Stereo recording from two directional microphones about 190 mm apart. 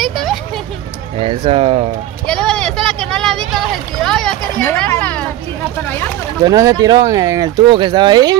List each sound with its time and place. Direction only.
0.0 s a sound: centre (ahead or behind)
1.1 s speech: 30° right (ahead or behind)
2.2 s speech: 5° left (ahead or behind)
6.4 s speech: 20° right (ahead or behind)